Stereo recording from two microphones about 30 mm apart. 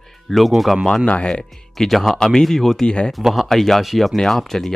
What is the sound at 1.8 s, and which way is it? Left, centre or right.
Speech, centre.